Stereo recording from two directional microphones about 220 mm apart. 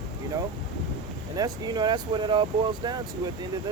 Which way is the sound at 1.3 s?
20° right (ahead or behind).